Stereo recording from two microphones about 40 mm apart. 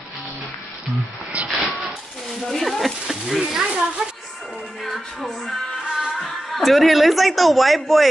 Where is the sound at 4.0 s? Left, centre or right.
Right.